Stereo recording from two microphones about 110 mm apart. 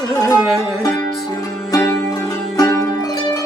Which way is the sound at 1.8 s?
25° left (ahead or behind).